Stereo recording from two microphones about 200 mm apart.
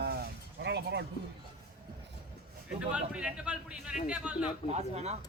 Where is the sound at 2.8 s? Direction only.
5° right (ahead or behind).